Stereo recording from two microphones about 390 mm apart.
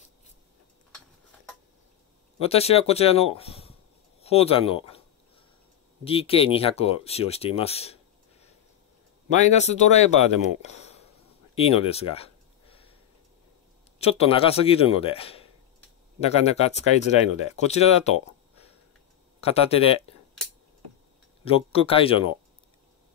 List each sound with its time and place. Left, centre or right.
2.4 s speech: centre
6.0 s speech: centre
9.3 s speech: centre
11.5 s a sound: centre
13.9 s speech: centre
19.4 s speech: centre
21.5 s speech: centre